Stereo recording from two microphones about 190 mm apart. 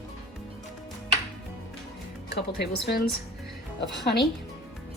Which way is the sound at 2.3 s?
60° left (ahead or behind).